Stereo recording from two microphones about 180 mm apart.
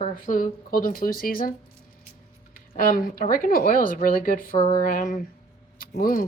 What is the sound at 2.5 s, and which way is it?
A woman's voice, 55° left (ahead or behind).